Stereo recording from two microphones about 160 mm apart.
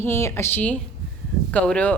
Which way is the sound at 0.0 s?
15° left (ahead or behind).